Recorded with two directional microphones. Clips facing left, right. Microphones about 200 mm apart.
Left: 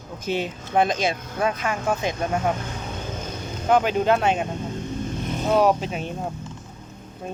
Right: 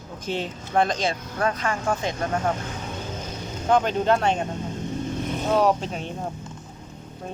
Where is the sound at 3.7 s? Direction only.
10° left (ahead or behind).